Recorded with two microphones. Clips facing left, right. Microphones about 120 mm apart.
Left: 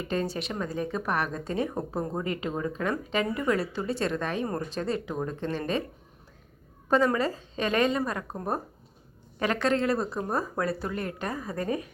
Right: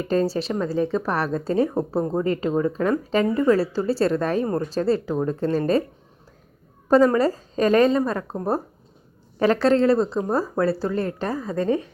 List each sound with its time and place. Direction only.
0.0 s speech: 35° right (ahead or behind)
6.9 s speech: 40° right (ahead or behind)